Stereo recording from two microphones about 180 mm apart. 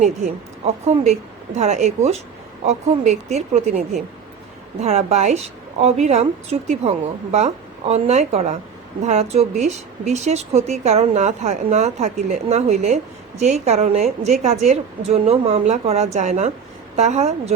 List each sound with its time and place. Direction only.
0.9 s speech: 40° right (ahead or behind)